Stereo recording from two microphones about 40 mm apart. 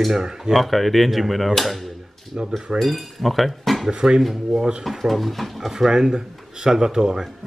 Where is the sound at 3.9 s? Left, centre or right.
Centre.